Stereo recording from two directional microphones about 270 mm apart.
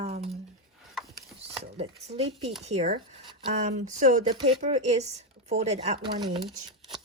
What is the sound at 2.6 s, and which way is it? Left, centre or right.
Speech, right.